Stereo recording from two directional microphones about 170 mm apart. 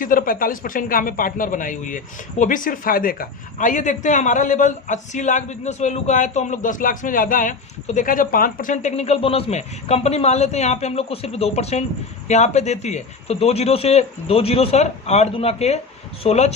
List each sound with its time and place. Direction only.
0.0 s a woman's voice: 55° left (ahead or behind)